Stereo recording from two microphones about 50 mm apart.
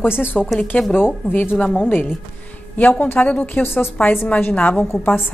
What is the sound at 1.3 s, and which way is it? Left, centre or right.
Speech, left.